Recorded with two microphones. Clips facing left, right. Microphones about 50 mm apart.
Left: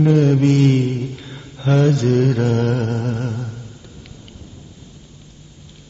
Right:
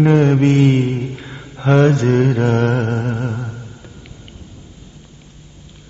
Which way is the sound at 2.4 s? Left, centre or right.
Right.